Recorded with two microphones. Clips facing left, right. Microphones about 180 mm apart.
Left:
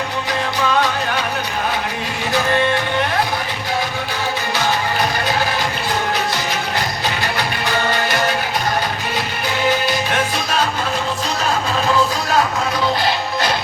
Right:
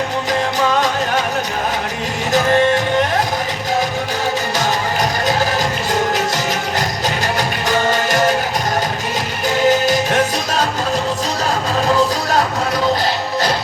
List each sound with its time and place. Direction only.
5.9 s music: 45° right (ahead or behind)
9.6 s music: 40° right (ahead or behind)